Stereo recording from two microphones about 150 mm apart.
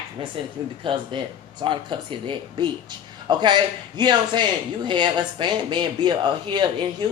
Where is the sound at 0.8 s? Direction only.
30° right (ahead or behind).